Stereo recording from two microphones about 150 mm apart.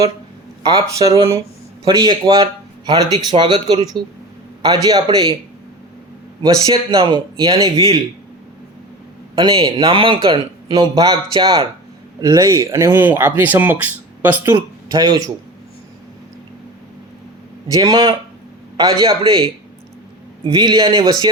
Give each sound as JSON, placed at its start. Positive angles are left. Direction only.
{"t": 0.6, "sound": "speech", "side_deg": -25}
{"t": 6.4, "sound": "speech", "side_deg": -30}
{"t": 9.3, "sound": "speech", "side_deg": -35}
{"t": 17.7, "sound": "speech", "side_deg": -25}